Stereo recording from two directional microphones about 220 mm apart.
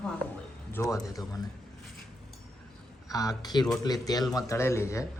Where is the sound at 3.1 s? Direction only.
15° left (ahead or behind).